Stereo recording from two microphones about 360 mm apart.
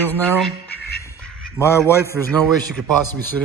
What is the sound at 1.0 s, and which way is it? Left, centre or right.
Quack, centre.